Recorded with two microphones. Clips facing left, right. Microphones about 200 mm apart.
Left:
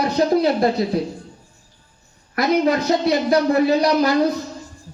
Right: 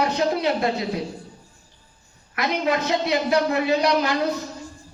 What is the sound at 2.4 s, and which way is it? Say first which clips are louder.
A man's voice: left 6 dB; 35° left (ahead or behind).